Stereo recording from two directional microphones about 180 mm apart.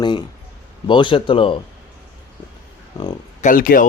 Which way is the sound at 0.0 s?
25° left (ahead or behind).